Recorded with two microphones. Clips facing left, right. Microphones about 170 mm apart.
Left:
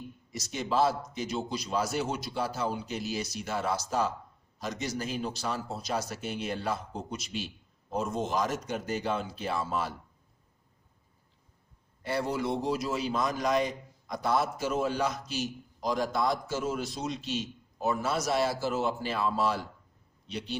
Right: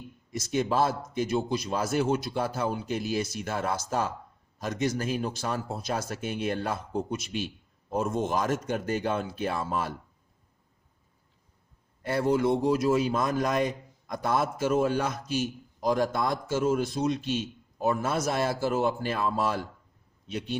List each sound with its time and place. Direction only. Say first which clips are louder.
0.3 s a man's voice: right 6 dB; 50° right (ahead or behind)
12.0 s a man's voice: right 6 dB; 50° right (ahead or behind)